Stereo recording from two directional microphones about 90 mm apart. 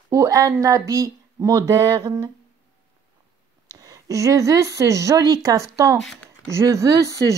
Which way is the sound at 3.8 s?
40° right (ahead or behind).